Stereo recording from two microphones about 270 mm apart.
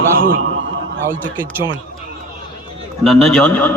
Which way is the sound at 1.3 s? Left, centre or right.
Centre.